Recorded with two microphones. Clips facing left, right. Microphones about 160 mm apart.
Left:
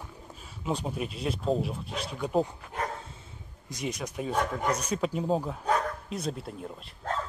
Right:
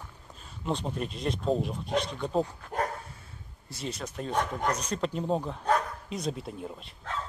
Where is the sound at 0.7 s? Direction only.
5° left (ahead or behind).